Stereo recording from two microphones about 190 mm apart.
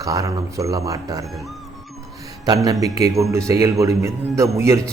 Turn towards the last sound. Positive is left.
turn(degrees=-15)  # may be behind; listen again after turning